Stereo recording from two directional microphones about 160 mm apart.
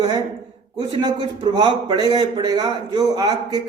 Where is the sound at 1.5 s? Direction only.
25° right (ahead or behind).